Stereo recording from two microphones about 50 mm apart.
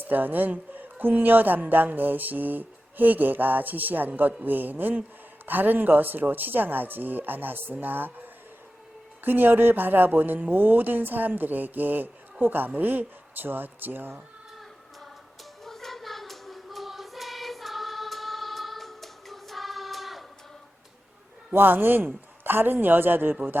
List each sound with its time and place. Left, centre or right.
0.0 s speech: right
9.2 s speech: right
15.6 s choir: centre
21.5 s a man's voice: right